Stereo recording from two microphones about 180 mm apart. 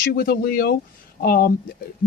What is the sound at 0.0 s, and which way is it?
Speech, 55° left (ahead or behind).